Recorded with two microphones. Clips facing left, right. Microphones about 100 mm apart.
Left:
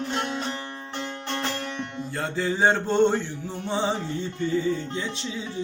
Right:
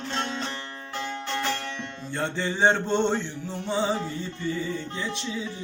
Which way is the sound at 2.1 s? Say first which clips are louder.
Left 1 dB; 5° left (ahead or behind).